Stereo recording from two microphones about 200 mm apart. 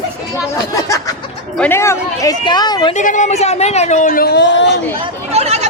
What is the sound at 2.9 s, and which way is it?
A man's voice, 40° left (ahead or behind).